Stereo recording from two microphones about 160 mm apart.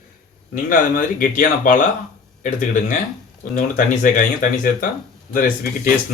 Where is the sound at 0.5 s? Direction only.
55° left (ahead or behind).